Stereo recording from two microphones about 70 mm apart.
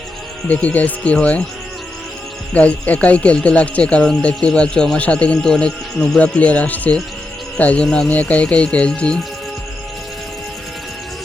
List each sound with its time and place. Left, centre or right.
0.4 s speech: left
2.5 s speech: left